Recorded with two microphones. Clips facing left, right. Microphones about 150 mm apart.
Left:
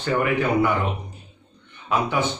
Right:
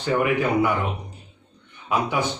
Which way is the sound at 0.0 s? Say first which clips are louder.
Even; 10° right (ahead or behind).